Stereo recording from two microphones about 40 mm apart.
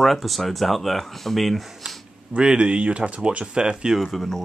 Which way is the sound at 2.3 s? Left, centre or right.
Right.